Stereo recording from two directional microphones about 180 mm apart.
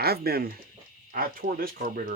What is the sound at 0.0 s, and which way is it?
Speech, 60° right (ahead or behind).